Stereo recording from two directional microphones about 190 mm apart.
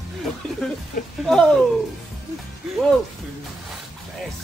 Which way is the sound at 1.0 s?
45° left (ahead or behind).